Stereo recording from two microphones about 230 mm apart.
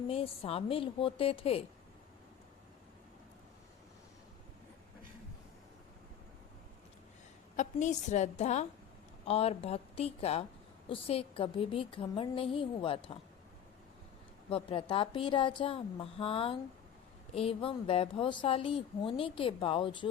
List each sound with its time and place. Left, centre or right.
0.1 s a woman's voice: left
7.5 s a woman's voice: left
14.5 s a woman's voice: left